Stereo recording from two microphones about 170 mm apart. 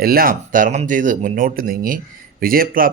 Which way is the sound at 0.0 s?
60° right (ahead or behind).